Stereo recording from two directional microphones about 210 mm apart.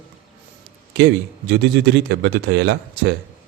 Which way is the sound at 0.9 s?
55° right (ahead or behind).